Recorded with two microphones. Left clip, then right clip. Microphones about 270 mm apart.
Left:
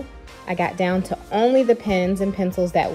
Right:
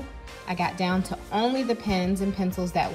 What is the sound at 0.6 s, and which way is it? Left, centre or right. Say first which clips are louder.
Speech: left 5 dB; centre.